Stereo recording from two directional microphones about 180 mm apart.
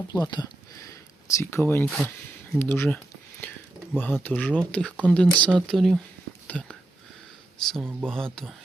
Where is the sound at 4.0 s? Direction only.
10° left (ahead or behind).